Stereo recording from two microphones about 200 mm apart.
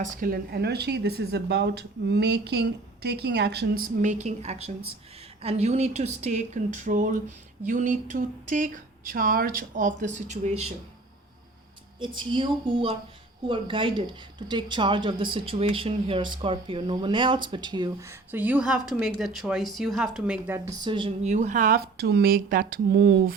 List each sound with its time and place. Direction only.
0.0 s speech: 40° right (ahead or behind)
11.9 s speech: 25° right (ahead or behind); by 20.6 s 5° right (ahead or behind)
20.7 s speech: 25° right (ahead or behind)
21.3 s speech: 40° right (ahead or behind)